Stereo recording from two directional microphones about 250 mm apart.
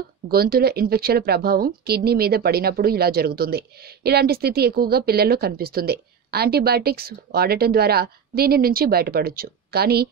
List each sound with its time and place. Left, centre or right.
0.3 s speech: right